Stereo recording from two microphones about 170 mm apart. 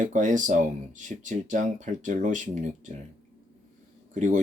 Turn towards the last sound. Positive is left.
turn(degrees=-45)  # may be behind; listen again after turning